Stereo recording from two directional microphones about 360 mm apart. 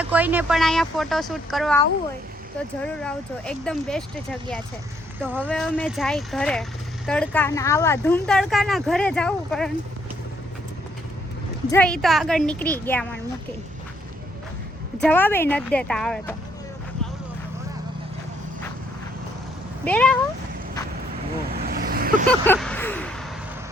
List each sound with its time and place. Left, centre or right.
0.0 s speech: centre
2.8 s speech: centre
11.7 s speech: centre
15.0 s speech: centre
19.8 s speech: centre
21.5 s vehicle: right
22.3 s a sound: centre